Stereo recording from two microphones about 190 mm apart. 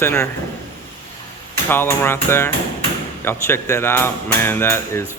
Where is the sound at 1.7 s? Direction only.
10° left (ahead or behind).